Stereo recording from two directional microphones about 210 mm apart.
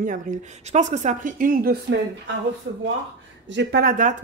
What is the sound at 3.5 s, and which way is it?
Speech, 55° right (ahead or behind).